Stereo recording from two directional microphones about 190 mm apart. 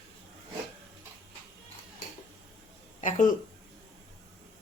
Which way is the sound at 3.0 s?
40° left (ahead or behind).